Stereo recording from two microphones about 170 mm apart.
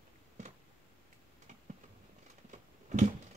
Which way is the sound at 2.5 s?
45° right (ahead or behind).